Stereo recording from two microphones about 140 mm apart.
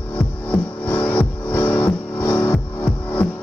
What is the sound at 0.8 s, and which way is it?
Music, 10° left (ahead or behind).